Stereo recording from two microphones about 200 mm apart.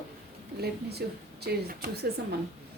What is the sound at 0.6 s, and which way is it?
A woman's voice, 55° right (ahead or behind).